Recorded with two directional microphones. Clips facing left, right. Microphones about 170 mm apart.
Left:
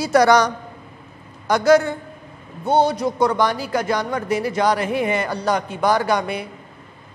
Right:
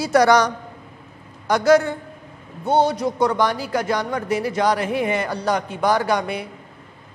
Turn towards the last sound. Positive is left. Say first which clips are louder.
# left 1 dB
turn(degrees=15)  # may be behind; listen again after turning